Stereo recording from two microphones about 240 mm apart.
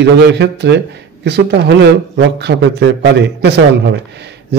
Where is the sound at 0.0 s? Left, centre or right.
Right.